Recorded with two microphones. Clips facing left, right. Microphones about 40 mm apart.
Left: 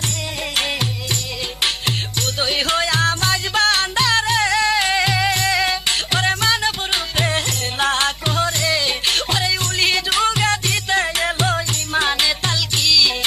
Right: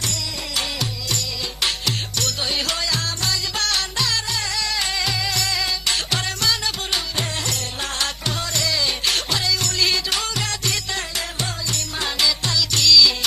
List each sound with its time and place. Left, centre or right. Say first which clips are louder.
2.2 s music: left 5 dB; left
12.7 s music: right 2 dB; left